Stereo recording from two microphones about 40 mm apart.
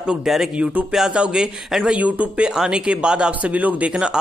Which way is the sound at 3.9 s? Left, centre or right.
Right.